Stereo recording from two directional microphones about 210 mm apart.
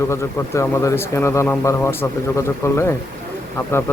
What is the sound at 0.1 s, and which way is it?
Speech, 15° left (ahead or behind).